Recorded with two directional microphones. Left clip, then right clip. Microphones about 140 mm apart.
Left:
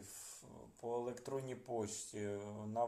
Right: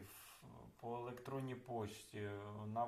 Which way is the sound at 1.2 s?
20° left (ahead or behind).